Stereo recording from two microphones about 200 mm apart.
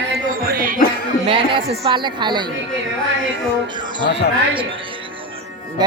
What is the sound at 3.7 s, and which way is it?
Speech, 20° right (ahead or behind).